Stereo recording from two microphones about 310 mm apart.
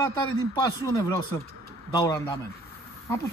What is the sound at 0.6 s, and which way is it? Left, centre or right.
A man's voice, centre.